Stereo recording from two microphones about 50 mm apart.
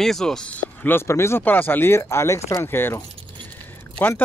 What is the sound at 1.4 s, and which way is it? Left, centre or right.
Speech, left.